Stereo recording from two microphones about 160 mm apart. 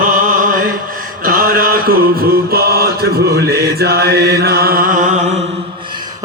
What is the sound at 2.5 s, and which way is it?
Mantra, 75° right (ahead or behind).